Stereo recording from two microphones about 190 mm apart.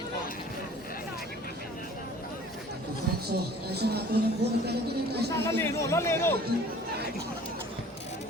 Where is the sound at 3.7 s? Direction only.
60° right (ahead or behind).